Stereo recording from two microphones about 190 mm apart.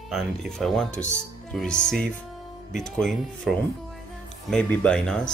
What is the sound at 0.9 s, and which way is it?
Speech, 40° left (ahead or behind).